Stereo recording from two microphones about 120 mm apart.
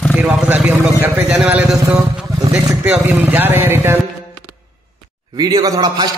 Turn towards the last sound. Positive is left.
turn(degrees=-35)  # may be behind; listen again after turning